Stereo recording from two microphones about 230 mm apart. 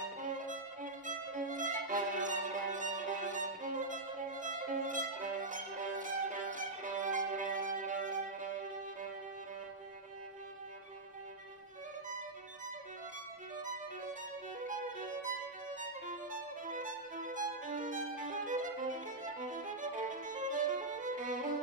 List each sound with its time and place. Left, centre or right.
0.0 s violin: right
14.7 s music: right